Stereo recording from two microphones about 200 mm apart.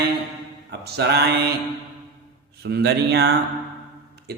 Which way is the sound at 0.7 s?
55° right (ahead or behind).